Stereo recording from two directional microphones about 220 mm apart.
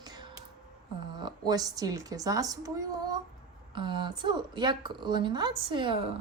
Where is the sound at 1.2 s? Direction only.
20° right (ahead or behind).